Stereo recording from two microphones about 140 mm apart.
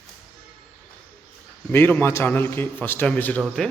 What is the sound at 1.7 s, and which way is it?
A man's voice, 15° left (ahead or behind).